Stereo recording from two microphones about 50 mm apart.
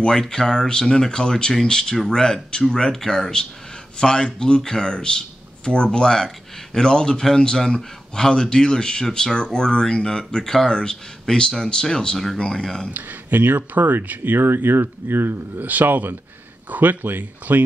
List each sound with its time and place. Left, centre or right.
0.0 s speech: centre
12.9 s speech: right